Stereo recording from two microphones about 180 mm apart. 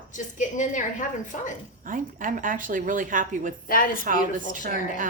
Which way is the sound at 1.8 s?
50° right (ahead or behind).